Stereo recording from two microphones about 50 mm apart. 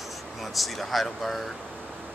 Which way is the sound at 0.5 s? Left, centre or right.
Centre.